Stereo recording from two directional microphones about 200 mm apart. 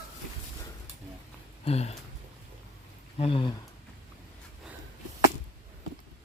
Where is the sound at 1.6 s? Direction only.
30° left (ahead or behind).